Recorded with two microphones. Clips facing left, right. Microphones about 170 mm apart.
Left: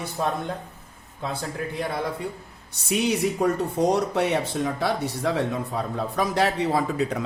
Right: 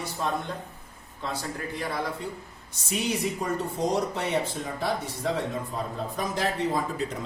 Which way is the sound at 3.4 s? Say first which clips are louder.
Left 6 dB; 65° left (ahead or behind).